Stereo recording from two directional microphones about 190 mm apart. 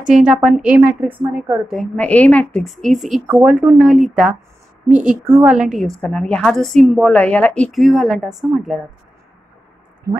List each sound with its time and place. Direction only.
0.1 s a woman's voice: 5° right (ahead or behind)